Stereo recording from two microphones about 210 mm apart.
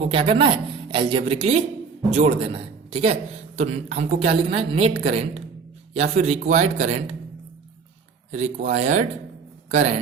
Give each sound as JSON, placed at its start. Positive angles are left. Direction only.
{"t": 0.0, "sound": "a woman's voice", "side_deg": -25}
{"t": 5.9, "sound": "speech", "side_deg": -30}
{"t": 8.3, "sound": "a man's voice", "side_deg": -35}